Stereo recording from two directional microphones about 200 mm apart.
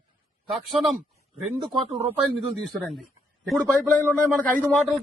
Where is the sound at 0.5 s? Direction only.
Centre (ahead or behind).